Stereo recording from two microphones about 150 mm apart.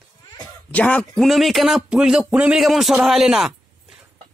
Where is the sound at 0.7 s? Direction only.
10° left (ahead or behind).